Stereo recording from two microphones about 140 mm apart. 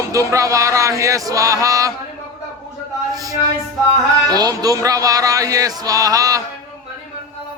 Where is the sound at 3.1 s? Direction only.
25° right (ahead or behind).